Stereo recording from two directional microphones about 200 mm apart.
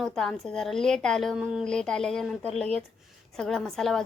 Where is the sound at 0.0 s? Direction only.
Centre (ahead or behind).